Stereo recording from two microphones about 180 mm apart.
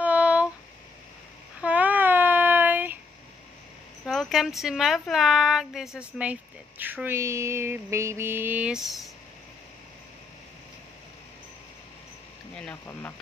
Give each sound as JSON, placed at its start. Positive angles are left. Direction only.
{"t": 0.0, "sound": "a sound", "side_deg": -5}
{"t": 1.6, "sound": "child singing", "side_deg": -10}
{"t": 4.0, "sound": "speech", "side_deg": 0}
{"t": 6.8, "sound": "mantra", "side_deg": -10}
{"t": 12.5, "sound": "speech", "side_deg": 10}